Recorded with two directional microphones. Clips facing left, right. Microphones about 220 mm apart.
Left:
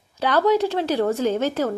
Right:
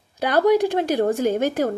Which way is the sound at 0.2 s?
15° right (ahead or behind).